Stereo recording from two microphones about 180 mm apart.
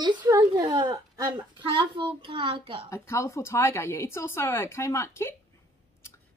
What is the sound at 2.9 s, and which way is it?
A woman's voice, 15° left (ahead or behind).